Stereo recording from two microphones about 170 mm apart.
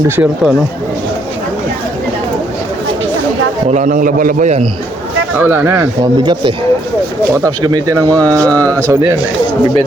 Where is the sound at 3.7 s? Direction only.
45° right (ahead or behind).